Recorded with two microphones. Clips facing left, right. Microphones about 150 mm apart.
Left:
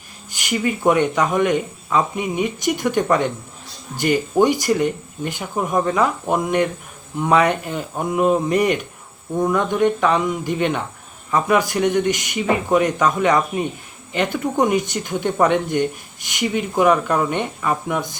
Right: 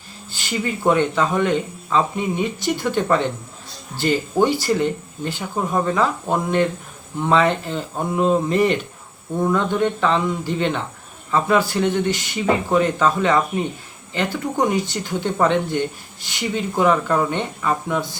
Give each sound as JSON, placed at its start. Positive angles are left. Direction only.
{"t": 0.3, "sound": "speech", "side_deg": 15}